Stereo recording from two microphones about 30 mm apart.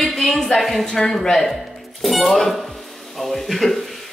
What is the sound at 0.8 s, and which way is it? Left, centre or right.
Speech, left.